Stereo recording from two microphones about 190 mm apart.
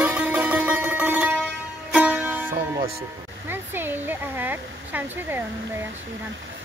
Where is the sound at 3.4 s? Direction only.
10° right (ahead or behind).